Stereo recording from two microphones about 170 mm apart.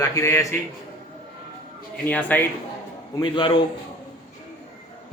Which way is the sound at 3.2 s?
30° left (ahead or behind).